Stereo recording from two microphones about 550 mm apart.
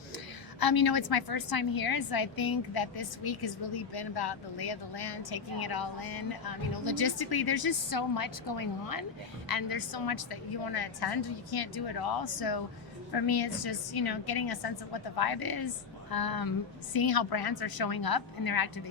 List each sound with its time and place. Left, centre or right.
0.6 s a woman's voice: left